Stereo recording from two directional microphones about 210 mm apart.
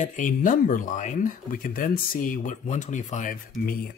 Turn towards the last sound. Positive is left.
turn(degrees=40)  # may be behind; listen again after turning